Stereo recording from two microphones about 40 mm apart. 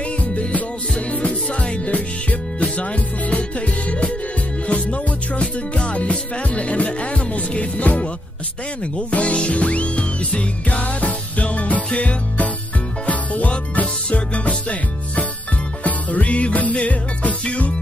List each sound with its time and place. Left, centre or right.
0.2 s music: left
9.1 s music: left
15.8 s music: left